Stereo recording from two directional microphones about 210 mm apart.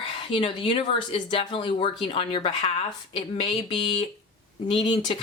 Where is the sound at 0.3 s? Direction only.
25° left (ahead or behind).